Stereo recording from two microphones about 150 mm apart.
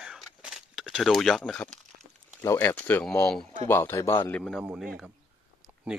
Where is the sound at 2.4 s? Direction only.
15° left (ahead or behind).